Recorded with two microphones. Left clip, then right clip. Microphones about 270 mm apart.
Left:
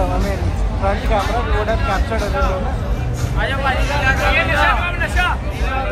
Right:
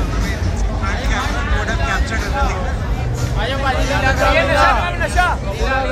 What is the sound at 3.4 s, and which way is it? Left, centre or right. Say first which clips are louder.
Speech: even; right.